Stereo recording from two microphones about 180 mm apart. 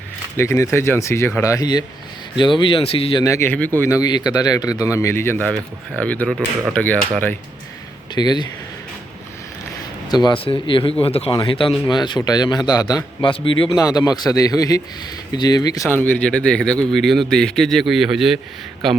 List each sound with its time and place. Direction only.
0.3 s speech: 15° left (ahead or behind)
3.2 s speech: 15° left (ahead or behind)
8.1 s speech: 25° left (ahead or behind)
10.1 s speech: 25° left (ahead or behind)
15.9 s speech: 10° left (ahead or behind)